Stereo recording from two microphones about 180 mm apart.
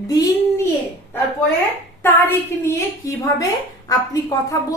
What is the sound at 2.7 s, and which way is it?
A woman's voice, 20° left (ahead or behind).